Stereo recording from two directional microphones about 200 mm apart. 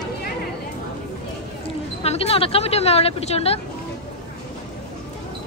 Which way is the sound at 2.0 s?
30° left (ahead or behind).